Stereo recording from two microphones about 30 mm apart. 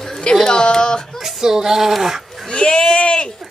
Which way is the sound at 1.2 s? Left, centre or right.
Centre.